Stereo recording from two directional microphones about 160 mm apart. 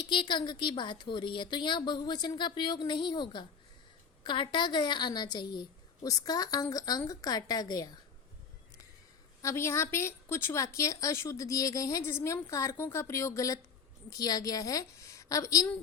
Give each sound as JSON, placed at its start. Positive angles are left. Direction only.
{"t": 0.1, "sound": "a woman's voice", "side_deg": 30}
{"t": 9.4, "sound": "a woman's voice", "side_deg": 15}